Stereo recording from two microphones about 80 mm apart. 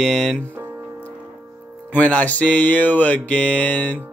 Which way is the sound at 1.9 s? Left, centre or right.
Centre.